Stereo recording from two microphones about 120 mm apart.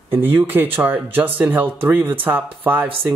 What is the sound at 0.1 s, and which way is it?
Speech, 20° right (ahead or behind).